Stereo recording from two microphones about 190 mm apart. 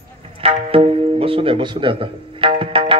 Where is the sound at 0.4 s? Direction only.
30° right (ahead or behind).